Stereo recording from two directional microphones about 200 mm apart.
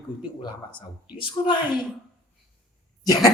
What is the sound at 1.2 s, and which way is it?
Speech, 25° left (ahead or behind).